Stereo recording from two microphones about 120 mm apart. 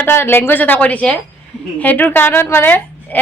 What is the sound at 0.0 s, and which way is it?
A woman's voice, 20° left (ahead or behind).